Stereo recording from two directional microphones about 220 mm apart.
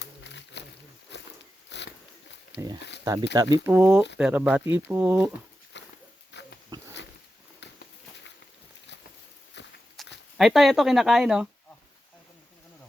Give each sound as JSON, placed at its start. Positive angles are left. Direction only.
{"t": 0.0, "sound": "insect", "side_deg": 55}
{"t": 1.1, "sound": "a sound", "side_deg": 50}
{"t": 1.7, "sound": "biting", "side_deg": 50}
{"t": 3.0, "sound": "speech", "side_deg": -20}
{"t": 5.7, "sound": "pig", "side_deg": 55}
{"t": 7.6, "sound": "a sound", "side_deg": 55}
{"t": 9.6, "sound": "walk", "side_deg": 50}
{"t": 10.0, "sound": "a sound", "side_deg": 0}
{"t": 10.3, "sound": "speech", "side_deg": 0}